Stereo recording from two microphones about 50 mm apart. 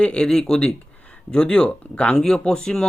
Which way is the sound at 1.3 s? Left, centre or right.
Left.